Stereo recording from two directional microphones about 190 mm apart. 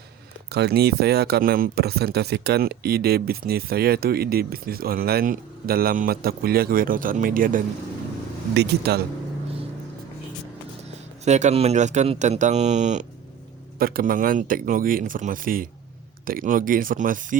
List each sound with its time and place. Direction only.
0.5 s speech: 60° right (ahead or behind)
11.3 s speech: 35° right (ahead or behind)
13.7 s speech: 50° right (ahead or behind)